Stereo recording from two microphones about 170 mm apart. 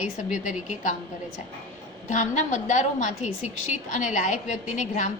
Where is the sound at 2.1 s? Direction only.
45° left (ahead or behind).